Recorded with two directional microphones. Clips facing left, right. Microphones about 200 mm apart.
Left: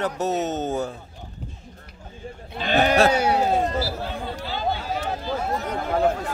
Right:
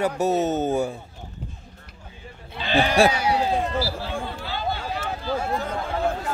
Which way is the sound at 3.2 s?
55° left (ahead or behind).